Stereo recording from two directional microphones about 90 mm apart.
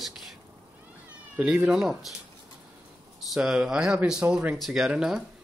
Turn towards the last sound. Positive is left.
turn(degrees=-5)  # may be behind; listen again after turning